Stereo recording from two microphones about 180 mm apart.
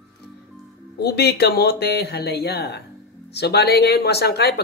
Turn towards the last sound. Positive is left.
turn(degrees=65)  # may be behind; listen again after turning